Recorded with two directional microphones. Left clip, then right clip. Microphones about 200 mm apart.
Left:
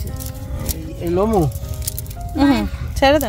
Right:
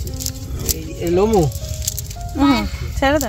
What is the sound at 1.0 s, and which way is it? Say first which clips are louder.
A woman's voice: right 2 dB; 20° left (ahead or behind).